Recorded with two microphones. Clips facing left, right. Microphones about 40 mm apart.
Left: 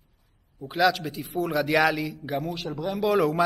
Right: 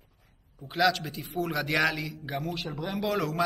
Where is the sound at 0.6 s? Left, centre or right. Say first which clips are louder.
Left 3 dB; centre.